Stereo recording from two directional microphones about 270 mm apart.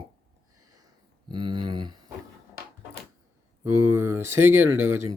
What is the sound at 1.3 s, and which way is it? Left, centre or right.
Speech, centre.